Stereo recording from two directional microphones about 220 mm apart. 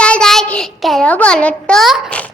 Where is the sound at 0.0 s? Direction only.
5° left (ahead or behind).